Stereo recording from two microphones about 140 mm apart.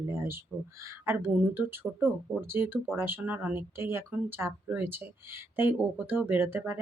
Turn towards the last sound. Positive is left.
turn(degrees=-15)  # may be behind; listen again after turning